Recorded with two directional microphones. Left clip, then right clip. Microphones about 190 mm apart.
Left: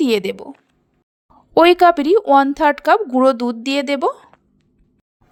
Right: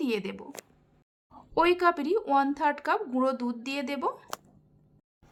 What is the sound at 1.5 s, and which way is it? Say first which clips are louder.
A woman's voice: left 13 dB; 40° left (ahead or behind).